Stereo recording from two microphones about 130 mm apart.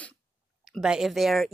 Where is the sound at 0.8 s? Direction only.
5° right (ahead or behind).